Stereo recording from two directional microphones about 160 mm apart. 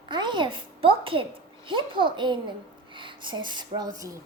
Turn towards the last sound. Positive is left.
turn(degrees=-25)  # may be behind; listen again after turning